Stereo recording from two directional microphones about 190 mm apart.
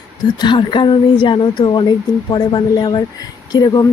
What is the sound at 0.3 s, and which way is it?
Speech, 25° left (ahead or behind).